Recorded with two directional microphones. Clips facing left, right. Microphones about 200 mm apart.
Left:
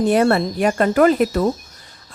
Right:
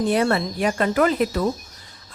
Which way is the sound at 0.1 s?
50° left (ahead or behind).